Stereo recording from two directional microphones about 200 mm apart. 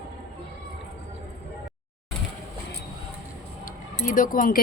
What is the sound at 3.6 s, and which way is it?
Chink, 40° left (ahead or behind).